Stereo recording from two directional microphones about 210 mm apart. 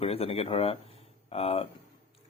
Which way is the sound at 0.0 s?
30° left (ahead or behind).